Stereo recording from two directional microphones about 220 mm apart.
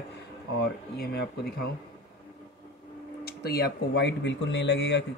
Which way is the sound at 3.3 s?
45° left (ahead or behind).